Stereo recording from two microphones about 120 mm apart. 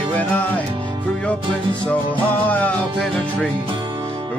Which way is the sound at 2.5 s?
10° left (ahead or behind).